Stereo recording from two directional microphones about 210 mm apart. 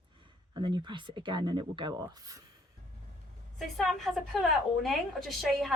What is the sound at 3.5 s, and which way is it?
A woman's voice, centre (ahead or behind).